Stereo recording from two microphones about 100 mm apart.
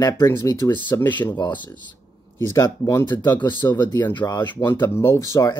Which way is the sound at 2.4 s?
30° left (ahead or behind).